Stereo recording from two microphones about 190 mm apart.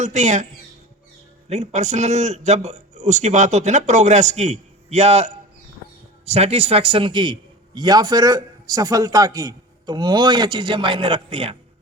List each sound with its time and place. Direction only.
0.0 s a man's voice: 40° right (ahead or behind)
1.5 s a man's voice: 35° right (ahead or behind)